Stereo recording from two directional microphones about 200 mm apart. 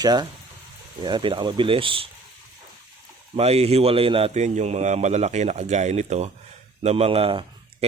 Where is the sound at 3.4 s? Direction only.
30° right (ahead or behind).